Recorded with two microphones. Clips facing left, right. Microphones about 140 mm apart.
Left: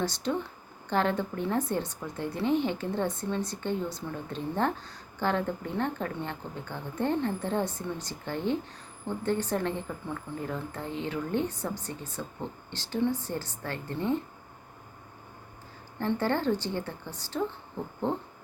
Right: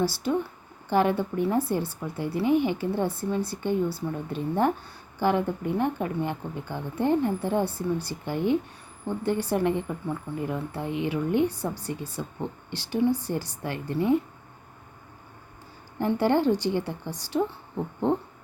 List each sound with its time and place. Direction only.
0.0 s a woman's voice: 10° right (ahead or behind)
16.0 s a woman's voice: 15° right (ahead or behind)